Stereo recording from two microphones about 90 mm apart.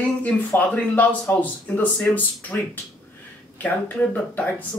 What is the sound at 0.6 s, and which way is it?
Speech, 20° left (ahead or behind).